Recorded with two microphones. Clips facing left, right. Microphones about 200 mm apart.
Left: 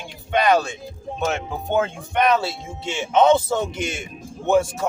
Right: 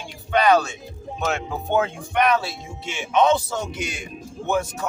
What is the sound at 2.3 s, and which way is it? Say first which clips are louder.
A man's voice: left 2 dB; 25° left (ahead or behind).